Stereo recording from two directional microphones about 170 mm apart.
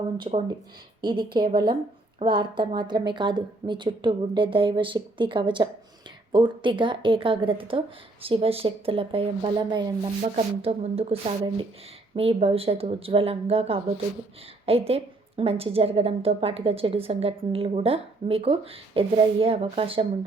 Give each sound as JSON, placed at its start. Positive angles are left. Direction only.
{"t": 0.2, "sound": "a woman's voice", "side_deg": -30}
{"t": 10.2, "sound": "a woman's voice", "side_deg": -35}